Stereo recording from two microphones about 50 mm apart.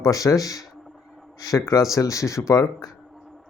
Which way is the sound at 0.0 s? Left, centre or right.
Left.